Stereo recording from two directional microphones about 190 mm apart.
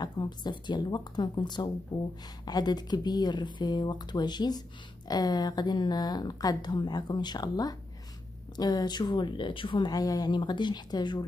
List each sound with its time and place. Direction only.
0.0 s speech: 20° left (ahead or behind)